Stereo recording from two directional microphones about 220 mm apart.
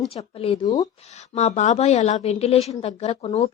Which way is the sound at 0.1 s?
25° left (ahead or behind).